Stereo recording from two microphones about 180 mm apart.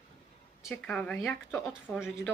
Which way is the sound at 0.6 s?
5° left (ahead or behind).